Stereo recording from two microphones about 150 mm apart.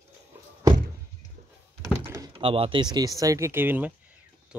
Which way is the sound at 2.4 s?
35° right (ahead or behind).